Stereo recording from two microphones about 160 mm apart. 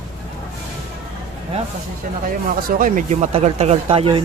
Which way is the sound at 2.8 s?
55° right (ahead or behind).